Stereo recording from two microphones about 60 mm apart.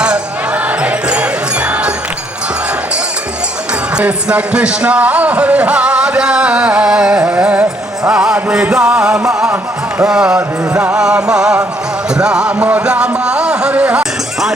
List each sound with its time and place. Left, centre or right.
0.0 s jingle bell: right
4.0 s speech: right
8.7 s music: centre